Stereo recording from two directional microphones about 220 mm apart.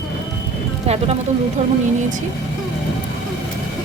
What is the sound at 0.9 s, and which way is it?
Speech, 30° right (ahead or behind).